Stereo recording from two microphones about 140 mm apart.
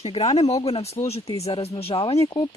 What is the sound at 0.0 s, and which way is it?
Speech, 45° left (ahead or behind).